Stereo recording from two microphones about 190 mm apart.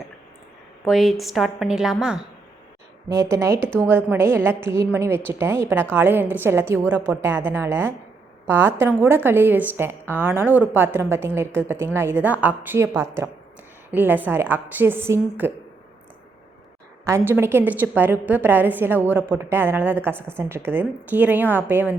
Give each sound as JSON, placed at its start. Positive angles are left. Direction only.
{"t": 0.9, "sound": "a woman's voice", "side_deg": 0}
{"t": 3.1, "sound": "a woman's voice", "side_deg": -15}
{"t": 17.1, "sound": "a woman's voice", "side_deg": -10}